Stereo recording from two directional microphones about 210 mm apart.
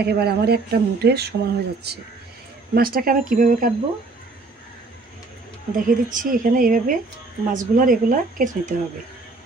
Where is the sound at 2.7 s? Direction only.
45° right (ahead or behind).